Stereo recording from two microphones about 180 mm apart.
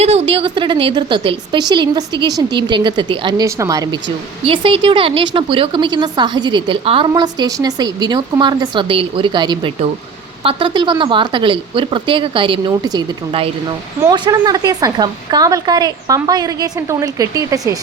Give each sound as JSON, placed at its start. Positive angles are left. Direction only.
{"t": 0.0, "sound": "a woman's voice", "side_deg": -35}
{"t": 4.4, "sound": "a woman's voice", "side_deg": -30}
{"t": 14.1, "sound": "a woman's voice", "side_deg": -20}